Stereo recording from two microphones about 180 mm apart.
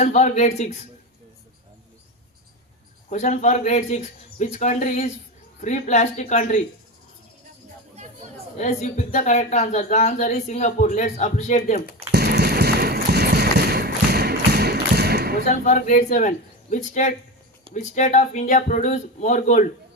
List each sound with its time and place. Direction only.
0.0 s speech: 40° left (ahead or behind)
3.1 s speech: 40° left (ahead or behind)
8.5 s speech: 40° left (ahead or behind)
12.1 s a sound: 65° right (ahead or behind)
15.4 s speech: 45° left (ahead or behind)